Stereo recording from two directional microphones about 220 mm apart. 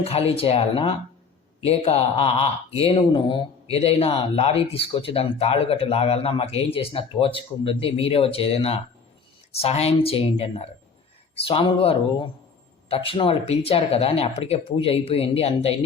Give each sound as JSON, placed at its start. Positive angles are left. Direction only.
{"t": 0.0, "sound": "speech", "side_deg": 25}